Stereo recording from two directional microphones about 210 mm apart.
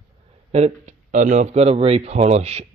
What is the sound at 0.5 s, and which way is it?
Speech, 30° right (ahead or behind).